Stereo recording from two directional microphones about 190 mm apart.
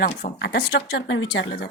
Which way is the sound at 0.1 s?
35° left (ahead or behind).